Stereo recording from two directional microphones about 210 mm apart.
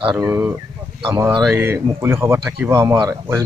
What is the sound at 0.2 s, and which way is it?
Speech, 10° right (ahead or behind).